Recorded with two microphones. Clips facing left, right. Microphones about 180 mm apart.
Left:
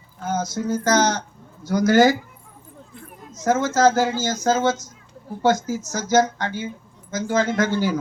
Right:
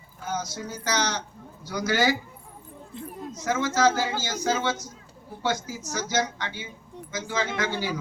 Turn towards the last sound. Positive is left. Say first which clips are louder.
# left 8 dB
turn(degrees=45)  # may be behind; listen again after turning